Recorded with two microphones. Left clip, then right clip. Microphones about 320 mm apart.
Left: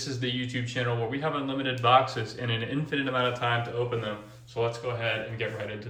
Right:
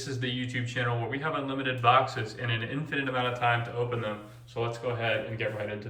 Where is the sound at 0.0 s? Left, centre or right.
Centre.